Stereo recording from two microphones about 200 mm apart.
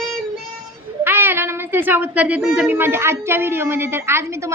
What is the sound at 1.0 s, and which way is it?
A woman's voice, 10° right (ahead or behind).